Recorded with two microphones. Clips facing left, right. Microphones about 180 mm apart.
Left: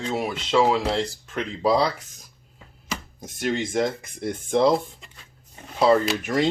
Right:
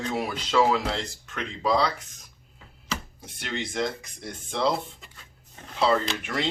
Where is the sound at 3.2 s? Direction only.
45° left (ahead or behind).